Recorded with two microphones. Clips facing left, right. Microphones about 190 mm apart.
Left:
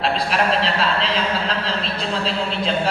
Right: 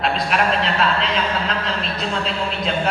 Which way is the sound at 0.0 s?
30° left (ahead or behind).